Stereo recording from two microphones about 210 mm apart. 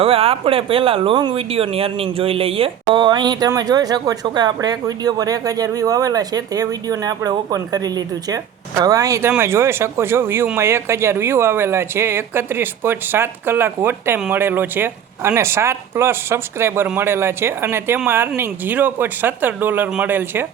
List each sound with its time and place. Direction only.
0.0 s a man's voice: 25° right (ahead or behind); by 20.5 s 10° right (ahead or behind)